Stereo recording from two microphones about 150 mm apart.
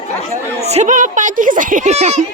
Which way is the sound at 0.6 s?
45° right (ahead or behind).